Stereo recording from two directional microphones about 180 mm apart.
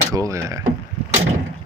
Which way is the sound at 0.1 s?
20° right (ahead or behind).